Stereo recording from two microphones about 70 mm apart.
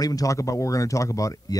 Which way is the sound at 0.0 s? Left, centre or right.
Left.